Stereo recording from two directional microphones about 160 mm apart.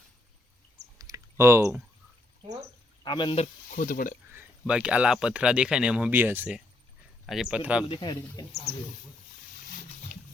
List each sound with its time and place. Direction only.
0.9 s a sound: 20° right (ahead or behind)
3.0 s speech: 30° left (ahead or behind)
3.3 s speech: 50° left (ahead or behind)
4.3 s speech: 10° right (ahead or behind)
7.9 s speech: 25° left (ahead or behind)